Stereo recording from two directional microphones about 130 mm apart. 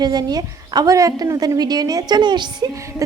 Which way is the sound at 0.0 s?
30° right (ahead or behind).